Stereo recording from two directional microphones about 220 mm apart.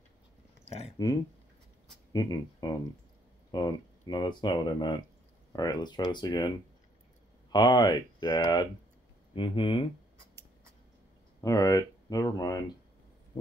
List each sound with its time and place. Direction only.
1.0 s speech: 15° left (ahead or behind)
7.5 s speech: 20° left (ahead or behind)
11.4 s speech: 15° left (ahead or behind)